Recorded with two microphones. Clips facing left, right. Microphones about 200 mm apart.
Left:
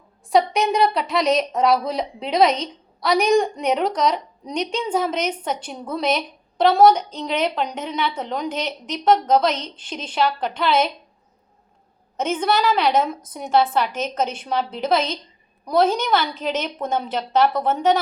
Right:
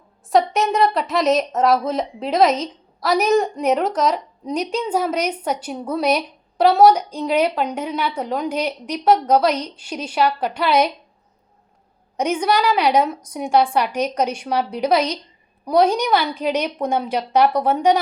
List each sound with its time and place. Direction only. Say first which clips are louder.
0.3 s a woman's voice: right 1 dB; centre (ahead or behind)
12.1 s a woman's voice: right 2 dB; 10° right (ahead or behind)